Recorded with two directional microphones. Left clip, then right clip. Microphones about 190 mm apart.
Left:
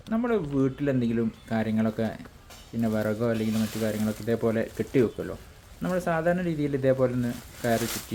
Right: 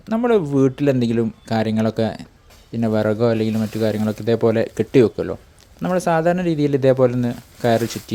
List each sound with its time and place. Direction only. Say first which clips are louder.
0.1 s speech: right 10 dB; 35° right (ahead or behind)